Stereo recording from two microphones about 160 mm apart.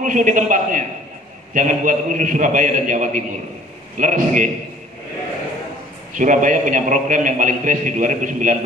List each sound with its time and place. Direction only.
0.0 s a man's voice: 55° right (ahead or behind)
6.1 s a man's voice: 55° right (ahead or behind)